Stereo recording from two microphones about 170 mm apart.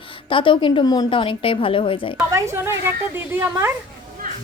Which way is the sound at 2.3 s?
15° right (ahead or behind).